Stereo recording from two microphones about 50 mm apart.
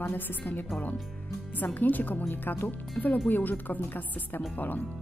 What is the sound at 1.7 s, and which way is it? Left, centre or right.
A woman's voice, left.